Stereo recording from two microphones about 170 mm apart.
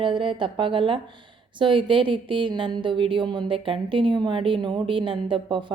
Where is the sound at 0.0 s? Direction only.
30° right (ahead or behind).